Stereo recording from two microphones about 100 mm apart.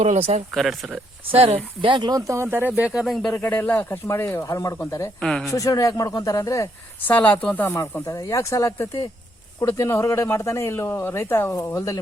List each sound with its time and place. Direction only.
0.0 s speech: 90° right
0.5 s speech: centre (ahead or behind)
1.3 s speech: 90° right
1.9 s speech: 45° right (ahead or behind); by 3.0 s 15° right (ahead or behind)
3.0 s speech: centre (ahead or behind)
3.8 s speech: 25° left (ahead or behind)
5.2 s speech: 5° left (ahead or behind)
5.5 s speech: 35° left (ahead or behind)
7.1 s speech: 15° left (ahead or behind); by 11.9 s 30° left (ahead or behind)